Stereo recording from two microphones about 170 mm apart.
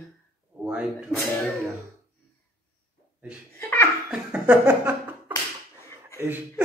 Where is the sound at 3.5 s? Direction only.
15° left (ahead or behind).